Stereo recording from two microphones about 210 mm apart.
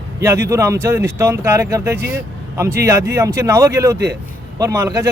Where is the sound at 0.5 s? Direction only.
15° right (ahead or behind).